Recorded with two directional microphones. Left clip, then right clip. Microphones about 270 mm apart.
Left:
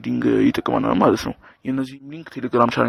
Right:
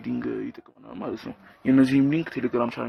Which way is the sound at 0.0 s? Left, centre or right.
Left.